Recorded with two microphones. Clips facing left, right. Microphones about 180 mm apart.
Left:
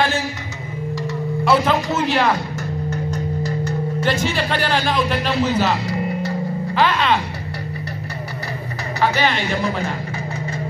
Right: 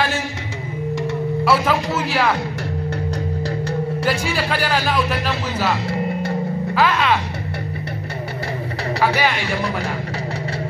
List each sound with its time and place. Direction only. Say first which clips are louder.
1.4 s a sound: left 2 dB; 5° right (ahead or behind)
3.1 s music: even; 35° right (ahead or behind)
4.0 s speech: left 3 dB; 5° right (ahead or behind)
6.7 s music: even; 5° right (ahead or behind)
9.0 s speech: even; 10° right (ahead or behind)